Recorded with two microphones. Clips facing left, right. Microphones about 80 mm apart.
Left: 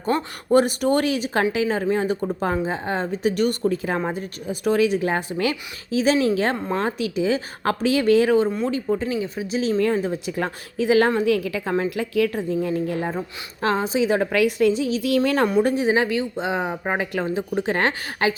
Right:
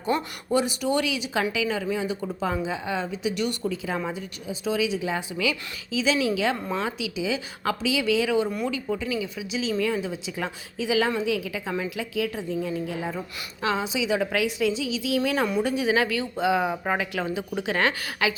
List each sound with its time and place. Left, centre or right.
0.0 s a woman's voice: left
8.4 s a woman's voice: left
15.4 s a woman's voice: left